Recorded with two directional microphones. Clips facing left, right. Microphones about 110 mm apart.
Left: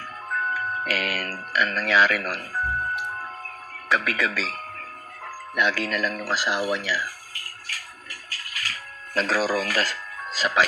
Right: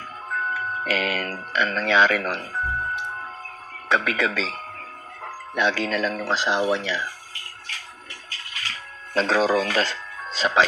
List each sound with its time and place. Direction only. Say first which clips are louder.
0.5 s speech: right 3 dB; 25° right (ahead or behind)
3.9 s music: right 2 dB; 25° right (ahead or behind)